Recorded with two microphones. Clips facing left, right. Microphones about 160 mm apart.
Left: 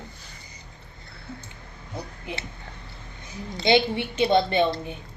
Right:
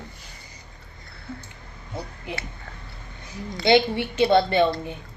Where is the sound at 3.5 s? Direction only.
20° left (ahead or behind).